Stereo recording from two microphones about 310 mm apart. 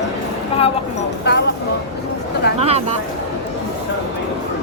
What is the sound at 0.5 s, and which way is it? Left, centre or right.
Speech, centre.